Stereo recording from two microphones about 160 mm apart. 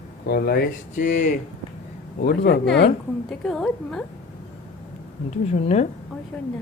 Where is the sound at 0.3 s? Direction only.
75° left (ahead or behind).